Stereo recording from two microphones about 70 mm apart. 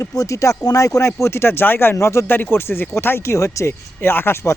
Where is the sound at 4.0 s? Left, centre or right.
Left.